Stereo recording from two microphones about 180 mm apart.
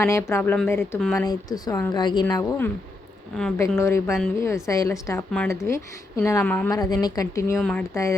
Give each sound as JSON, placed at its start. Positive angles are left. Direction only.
{"t": 0.0, "sound": "speech", "side_deg": 15}
{"t": 1.3, "sound": "a woman's voice", "side_deg": 20}
{"t": 3.8, "sound": "speech", "side_deg": 15}
{"t": 6.7, "sound": "a woman's voice", "side_deg": 20}
{"t": 7.6, "sound": "speech", "side_deg": 5}